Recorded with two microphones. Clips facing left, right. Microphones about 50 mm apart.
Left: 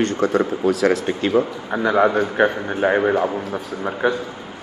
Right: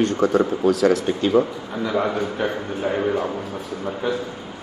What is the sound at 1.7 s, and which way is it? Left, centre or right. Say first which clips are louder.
Speech: left 6 dB; left.